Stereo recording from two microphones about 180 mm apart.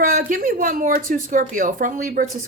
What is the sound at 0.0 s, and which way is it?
A woman's voice, 50° right (ahead or behind).